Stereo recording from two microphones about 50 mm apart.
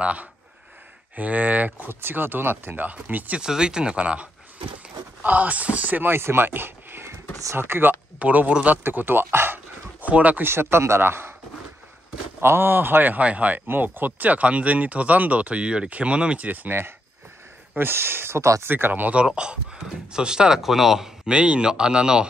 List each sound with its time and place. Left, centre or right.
0.0 s speech: right
1.9 s speech: right
3.3 s speech: centre
6.0 s a man's voice: right
8.2 s speech: right
8.8 s a man's voice: right
10.0 s speech: right
10.4 s a man's voice: right
12.4 s a man's voice: right
13.7 s speech: right
17.7 s a man's voice: right
18.4 s speech: right
18.7 s speech: right
19.2 s speech: centre